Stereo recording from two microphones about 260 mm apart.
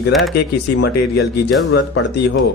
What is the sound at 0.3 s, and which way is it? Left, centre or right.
Speech, left.